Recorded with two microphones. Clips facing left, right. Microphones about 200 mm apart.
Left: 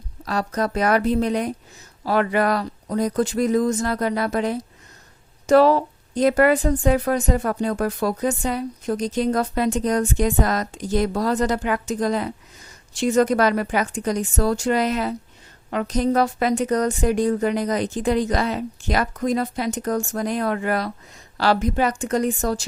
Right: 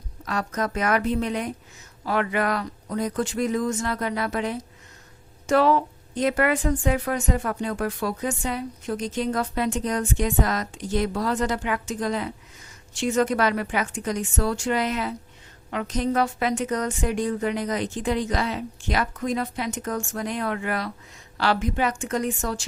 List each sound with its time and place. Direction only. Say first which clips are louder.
0.3 s a woman's voice: left 4 dB; 35° left (ahead or behind)